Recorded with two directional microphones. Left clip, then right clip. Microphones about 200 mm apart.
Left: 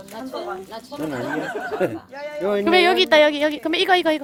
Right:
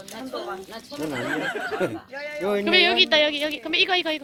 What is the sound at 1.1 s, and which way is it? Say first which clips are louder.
Speech: even; 5° right (ahead or behind).